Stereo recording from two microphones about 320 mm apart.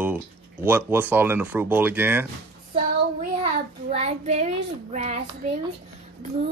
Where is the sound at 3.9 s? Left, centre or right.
Centre.